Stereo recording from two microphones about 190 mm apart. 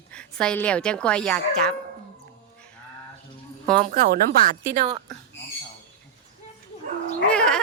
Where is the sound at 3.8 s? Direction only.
45° right (ahead or behind).